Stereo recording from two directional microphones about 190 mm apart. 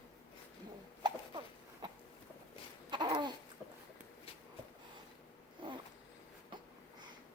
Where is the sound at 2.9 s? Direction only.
25° right (ahead or behind).